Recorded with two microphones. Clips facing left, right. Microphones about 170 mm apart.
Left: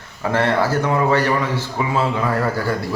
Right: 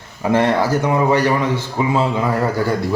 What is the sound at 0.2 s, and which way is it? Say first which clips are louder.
A man's voice: right 3 dB; 15° right (ahead or behind).